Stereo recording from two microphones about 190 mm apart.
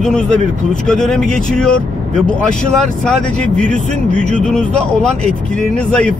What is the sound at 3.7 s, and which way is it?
Speech, 40° right (ahead or behind).